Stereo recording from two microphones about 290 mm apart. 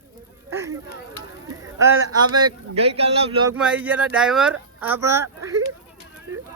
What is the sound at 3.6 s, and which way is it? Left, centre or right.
Speech, centre.